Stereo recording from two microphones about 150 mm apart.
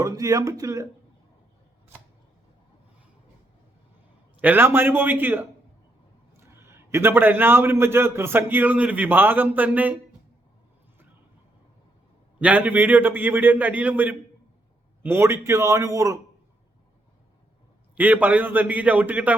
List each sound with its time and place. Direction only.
0.0 s a man's voice: 20° right (ahead or behind)
4.4 s a man's voice: 15° right (ahead or behind)
12.4 s a man's voice: 10° right (ahead or behind)
17.9 s a man's voice: 10° right (ahead or behind)